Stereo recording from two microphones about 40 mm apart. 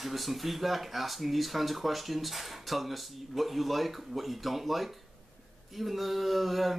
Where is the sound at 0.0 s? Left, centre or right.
Centre.